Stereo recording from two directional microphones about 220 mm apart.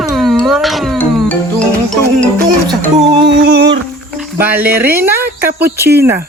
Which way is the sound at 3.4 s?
50° right (ahead or behind).